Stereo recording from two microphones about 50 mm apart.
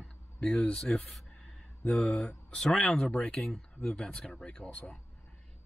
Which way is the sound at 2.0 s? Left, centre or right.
Centre.